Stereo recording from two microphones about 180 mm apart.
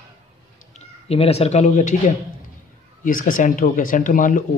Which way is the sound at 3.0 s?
50° left (ahead or behind).